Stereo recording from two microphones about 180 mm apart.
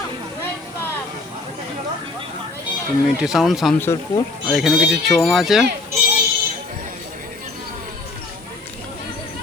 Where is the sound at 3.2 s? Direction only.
Centre (ahead or behind).